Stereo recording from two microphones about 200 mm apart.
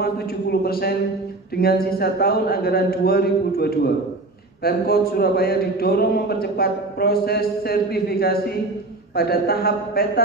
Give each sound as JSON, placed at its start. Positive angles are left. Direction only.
{"t": 0.0, "sound": "a man's voice", "side_deg": 50}